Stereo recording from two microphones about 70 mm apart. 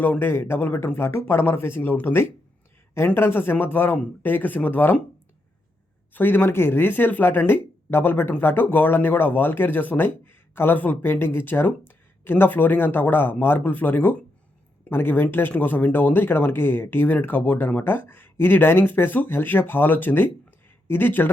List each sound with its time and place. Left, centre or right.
0.0 s speech: left
6.1 s speech: left